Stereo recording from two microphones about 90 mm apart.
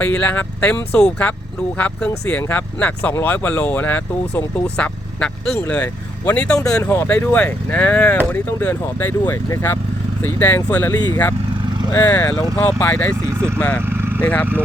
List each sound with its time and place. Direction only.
0.0 s speech: 15° left (ahead or behind)
6.5 s speech: 35° left (ahead or behind)
6.8 s speech: 25° left (ahead or behind)
9.5 s speech: 35° left (ahead or behind)
10.2 s speech: 25° left (ahead or behind)
10.9 s speech: 50° left (ahead or behind)
11.9 s speech: 35° left (ahead or behind)
13.2 s speech: 30° right (ahead or behind)
13.6 s speech: 15° left (ahead or behind)
13.8 s a sound: 25° right (ahead or behind)
14.2 s speech: 15° left (ahead or behind)